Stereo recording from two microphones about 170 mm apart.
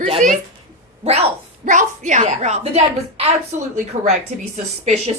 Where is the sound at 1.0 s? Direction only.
35° right (ahead or behind).